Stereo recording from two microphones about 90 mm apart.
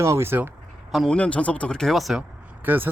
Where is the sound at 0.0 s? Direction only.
30° right (ahead or behind).